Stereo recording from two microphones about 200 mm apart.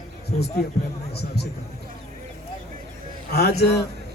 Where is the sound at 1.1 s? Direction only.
55° left (ahead or behind).